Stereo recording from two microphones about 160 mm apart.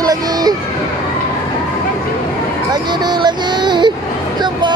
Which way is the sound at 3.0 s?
30° right (ahead or behind).